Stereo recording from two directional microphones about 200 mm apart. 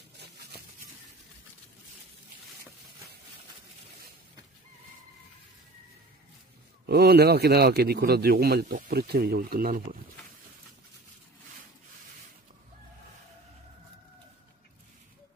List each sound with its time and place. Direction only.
6.9 s a man's voice: 55° right (ahead or behind)